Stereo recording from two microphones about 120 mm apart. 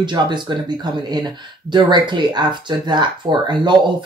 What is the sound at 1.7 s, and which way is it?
Speech, 40° right (ahead or behind).